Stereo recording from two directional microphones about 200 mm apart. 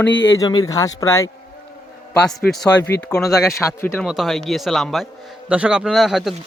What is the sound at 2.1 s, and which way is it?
Speech, 5° left (ahead or behind).